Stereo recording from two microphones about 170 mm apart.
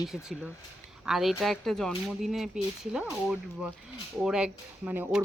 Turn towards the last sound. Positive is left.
turn(degrees=-10)  # may be behind; listen again after turning